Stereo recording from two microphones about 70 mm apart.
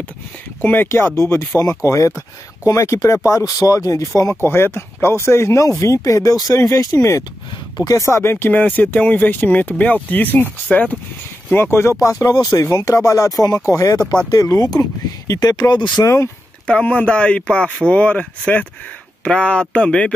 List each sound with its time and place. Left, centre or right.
0.6 s speech: left
0.8 s speech: left
4.5 s speech: left
8.2 s speech: left
8.5 s speech: left
11.5 s speech: left
12.0 s speech: left
15.4 s speech: left
16.6 s speech: centre